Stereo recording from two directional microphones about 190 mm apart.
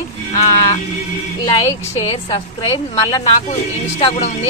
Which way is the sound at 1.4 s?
20° left (ahead or behind).